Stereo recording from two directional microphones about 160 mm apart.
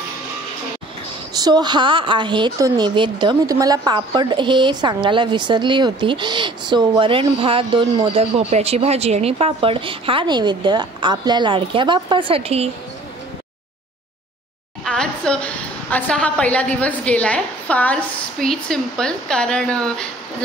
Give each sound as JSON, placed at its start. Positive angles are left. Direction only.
{"t": 1.3, "sound": "a woman's voice", "side_deg": -25}
{"t": 14.9, "sound": "a woman's voice", "side_deg": 5}